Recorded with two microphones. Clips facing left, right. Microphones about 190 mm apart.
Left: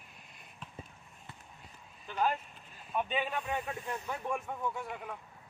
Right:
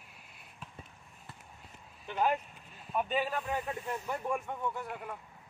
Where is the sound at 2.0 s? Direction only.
20° right (ahead or behind).